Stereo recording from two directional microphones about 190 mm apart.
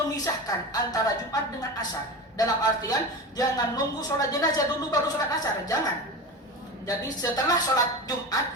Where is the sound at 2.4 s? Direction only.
20° left (ahead or behind).